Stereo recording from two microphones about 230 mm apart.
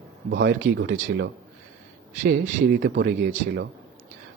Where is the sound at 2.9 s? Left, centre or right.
Right.